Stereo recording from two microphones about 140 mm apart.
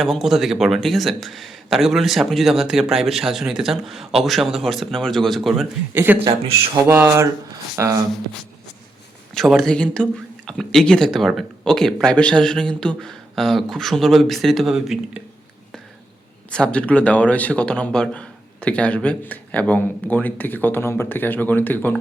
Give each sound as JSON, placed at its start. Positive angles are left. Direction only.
{"t": 0.0, "sound": "speech", "side_deg": 0}
{"t": 5.9, "sound": "a sound", "side_deg": -15}
{"t": 7.8, "sound": "speech", "side_deg": -20}
{"t": 9.3, "sound": "speech", "side_deg": 0}
{"t": 16.5, "sound": "speech", "side_deg": 5}